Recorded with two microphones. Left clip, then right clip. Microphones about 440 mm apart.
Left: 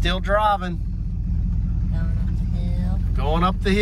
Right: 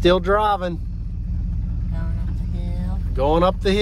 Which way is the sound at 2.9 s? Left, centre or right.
Centre.